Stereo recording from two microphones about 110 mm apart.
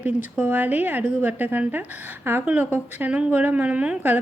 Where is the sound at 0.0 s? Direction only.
15° right (ahead or behind).